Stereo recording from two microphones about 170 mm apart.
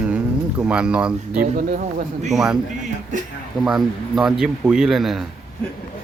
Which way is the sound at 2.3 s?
5° right (ahead or behind).